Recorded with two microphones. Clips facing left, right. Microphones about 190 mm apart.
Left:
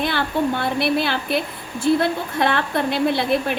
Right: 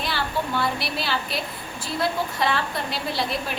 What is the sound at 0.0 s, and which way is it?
A woman's voice, 55° left (ahead or behind).